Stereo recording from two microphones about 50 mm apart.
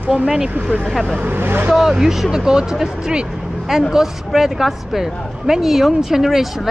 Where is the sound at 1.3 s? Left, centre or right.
Right.